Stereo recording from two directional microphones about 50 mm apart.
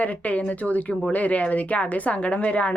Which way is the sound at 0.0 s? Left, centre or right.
Left.